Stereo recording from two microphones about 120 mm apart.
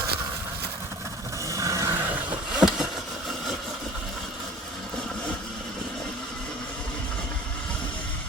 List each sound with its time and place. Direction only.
1.5 s vehicle: 25° right (ahead or behind)
2.6 s vehicle: 5° right (ahead or behind)